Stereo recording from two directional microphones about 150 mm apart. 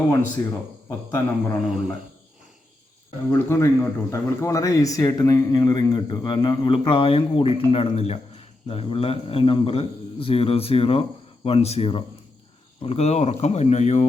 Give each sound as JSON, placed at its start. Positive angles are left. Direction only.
{"t": 0.9, "sound": "speech", "side_deg": 20}
{"t": 1.6, "sound": "a man's voice", "side_deg": 0}
{"t": 3.3, "sound": "a man's voice", "side_deg": 15}